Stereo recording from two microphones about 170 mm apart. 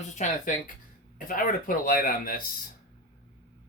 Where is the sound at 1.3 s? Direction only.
55° left (ahead or behind).